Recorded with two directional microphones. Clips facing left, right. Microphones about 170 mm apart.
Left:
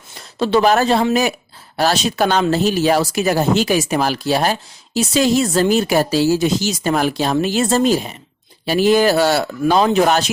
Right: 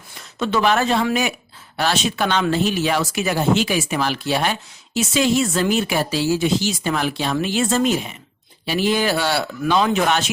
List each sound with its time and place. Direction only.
0.3 s speech: 35° left (ahead or behind)